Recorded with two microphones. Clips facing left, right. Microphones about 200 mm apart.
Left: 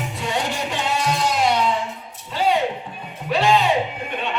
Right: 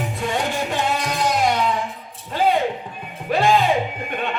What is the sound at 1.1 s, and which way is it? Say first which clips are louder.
Music: left 2 dB; 50° right (ahead or behind).